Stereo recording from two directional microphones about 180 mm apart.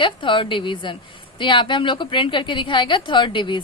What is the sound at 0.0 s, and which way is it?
A woman's voice, 30° left (ahead or behind).